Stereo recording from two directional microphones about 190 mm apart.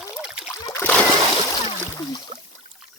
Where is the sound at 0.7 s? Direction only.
15° left (ahead or behind).